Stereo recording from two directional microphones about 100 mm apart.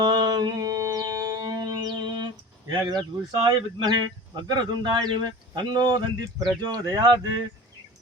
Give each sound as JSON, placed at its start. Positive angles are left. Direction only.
{"t": 0.0, "sound": "music", "side_deg": -45}
{"t": 2.8, "sound": "speech", "side_deg": -45}